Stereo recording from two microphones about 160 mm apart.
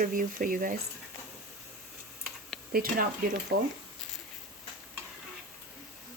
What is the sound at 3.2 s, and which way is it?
Speech, 65° right (ahead or behind).